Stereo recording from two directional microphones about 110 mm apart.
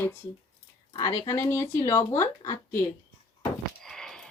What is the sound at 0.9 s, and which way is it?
Speech, 35° left (ahead or behind).